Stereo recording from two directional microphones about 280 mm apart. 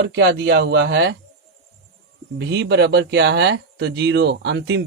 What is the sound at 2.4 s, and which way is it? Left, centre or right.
Speech, right.